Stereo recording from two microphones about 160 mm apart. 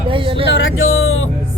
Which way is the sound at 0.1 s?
35° right (ahead or behind).